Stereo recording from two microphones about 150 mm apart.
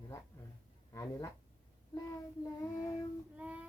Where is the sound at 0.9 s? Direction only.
20° left (ahead or behind).